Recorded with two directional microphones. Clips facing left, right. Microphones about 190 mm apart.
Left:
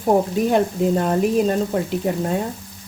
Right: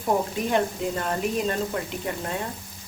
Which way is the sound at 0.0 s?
40° left (ahead or behind).